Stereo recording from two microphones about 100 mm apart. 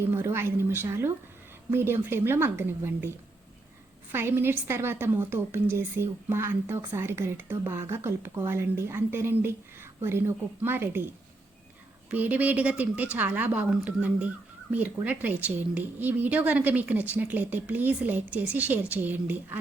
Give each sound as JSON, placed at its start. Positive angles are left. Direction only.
{"t": 0.0, "sound": "a woman's voice", "side_deg": -25}
{"t": 4.1, "sound": "a woman's voice", "side_deg": -25}
{"t": 12.1, "sound": "a woman's voice", "side_deg": -15}